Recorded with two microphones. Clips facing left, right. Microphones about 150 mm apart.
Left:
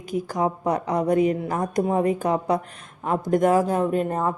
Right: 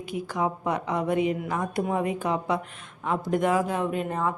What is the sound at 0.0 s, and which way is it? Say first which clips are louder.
A woman's voice: left 4 dB; 40° left (ahead or behind).